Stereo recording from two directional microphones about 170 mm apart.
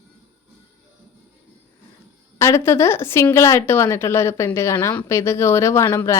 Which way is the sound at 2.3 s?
15° left (ahead or behind).